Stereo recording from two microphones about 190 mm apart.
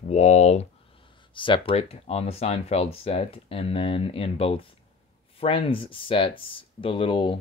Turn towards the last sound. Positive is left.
turn(degrees=25)  # may be behind; listen again after turning